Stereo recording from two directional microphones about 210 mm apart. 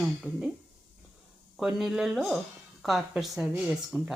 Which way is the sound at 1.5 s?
5° right (ahead or behind).